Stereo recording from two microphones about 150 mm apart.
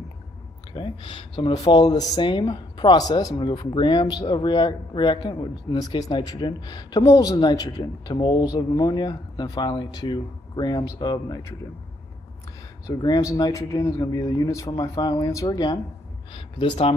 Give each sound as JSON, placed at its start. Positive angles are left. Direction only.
{"t": 0.7, "sound": "speech", "side_deg": 35}
{"t": 12.8, "sound": "speech", "side_deg": 25}